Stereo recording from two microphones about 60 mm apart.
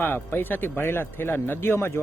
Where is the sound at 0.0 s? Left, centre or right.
Left.